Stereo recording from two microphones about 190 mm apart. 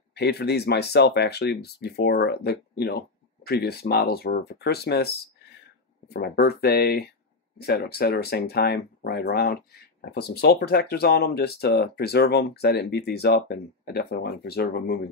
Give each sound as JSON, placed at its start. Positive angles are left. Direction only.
{"t": 0.1, "sound": "speech", "side_deg": 60}